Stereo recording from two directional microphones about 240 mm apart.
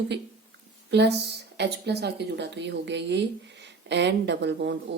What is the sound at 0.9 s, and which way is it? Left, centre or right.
Speech, right.